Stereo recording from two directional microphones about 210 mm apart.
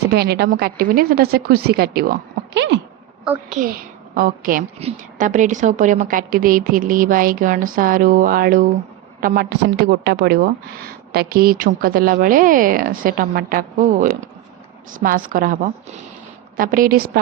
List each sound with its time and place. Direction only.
0.1 s a woman's voice: 50° right (ahead or behind)
3.5 s a woman's voice: 40° right (ahead or behind)